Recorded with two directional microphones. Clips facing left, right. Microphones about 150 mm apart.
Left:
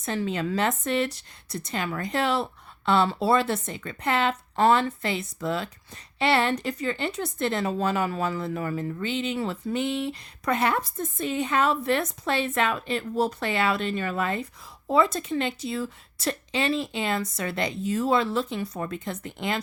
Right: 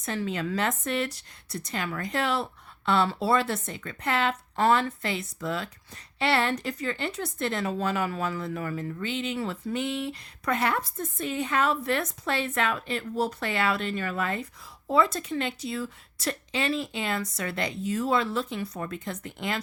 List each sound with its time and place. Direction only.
0.0 s a woman's voice: 25° left (ahead or behind)